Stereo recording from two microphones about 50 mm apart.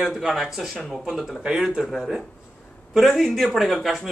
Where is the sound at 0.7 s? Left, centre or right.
Centre.